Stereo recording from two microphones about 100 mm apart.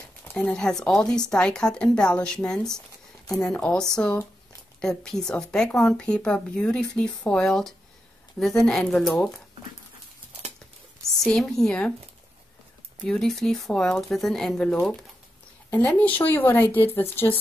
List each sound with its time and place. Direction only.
0.2 s speech: 15° left (ahead or behind)
11.2 s speech: 5° left (ahead or behind)
13.0 s speech: 5° left (ahead or behind)